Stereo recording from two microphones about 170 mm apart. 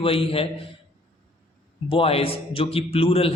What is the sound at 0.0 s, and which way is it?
Speech, 35° left (ahead or behind).